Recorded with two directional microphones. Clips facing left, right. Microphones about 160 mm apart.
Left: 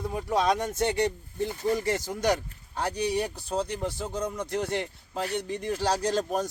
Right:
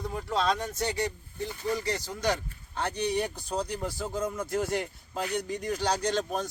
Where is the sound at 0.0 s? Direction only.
15° left (ahead or behind).